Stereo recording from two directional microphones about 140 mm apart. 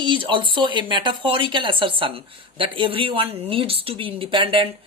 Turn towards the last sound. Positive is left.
turn(degrees=-40)  # may be behind; listen again after turning